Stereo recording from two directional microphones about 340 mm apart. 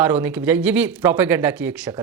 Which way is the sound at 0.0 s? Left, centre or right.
Centre.